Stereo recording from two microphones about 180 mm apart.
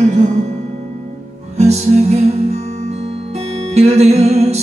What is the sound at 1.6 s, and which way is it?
Music, 35° right (ahead or behind).